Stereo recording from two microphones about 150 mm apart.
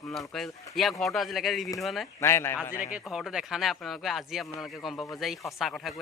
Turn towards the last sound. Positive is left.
turn(degrees=0)  # may be behind; listen again after turning